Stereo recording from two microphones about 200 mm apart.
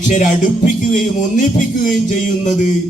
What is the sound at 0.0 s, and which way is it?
Music, 40° left (ahead or behind).